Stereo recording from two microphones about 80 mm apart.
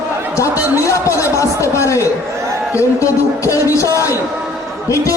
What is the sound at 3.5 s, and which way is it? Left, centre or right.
Music, left.